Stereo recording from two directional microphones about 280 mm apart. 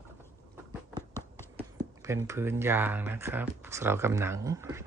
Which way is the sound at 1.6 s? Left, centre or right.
Centre.